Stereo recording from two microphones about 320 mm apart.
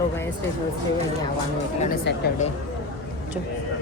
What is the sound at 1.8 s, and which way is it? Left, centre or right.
Speech, left.